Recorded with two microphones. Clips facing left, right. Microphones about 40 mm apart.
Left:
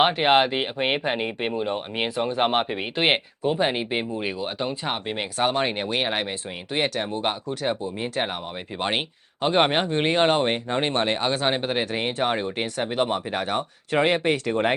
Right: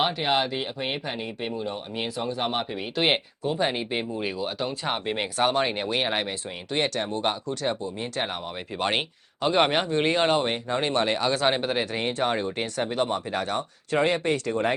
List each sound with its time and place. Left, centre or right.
0.0 s speech: left
3.0 s speech: left
4.9 s speech: centre
9.4 s speech: left
11.4 s speech: centre; by 14.8 s left